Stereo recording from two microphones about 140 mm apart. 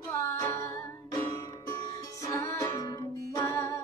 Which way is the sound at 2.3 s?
20° left (ahead or behind).